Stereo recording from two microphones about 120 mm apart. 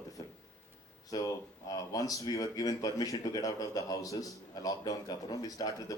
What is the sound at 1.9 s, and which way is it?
A man's voice, 30° left (ahead or behind).